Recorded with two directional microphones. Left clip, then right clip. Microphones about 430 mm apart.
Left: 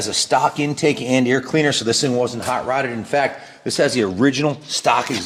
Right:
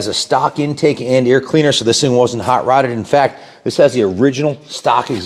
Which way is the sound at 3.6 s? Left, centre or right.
Centre.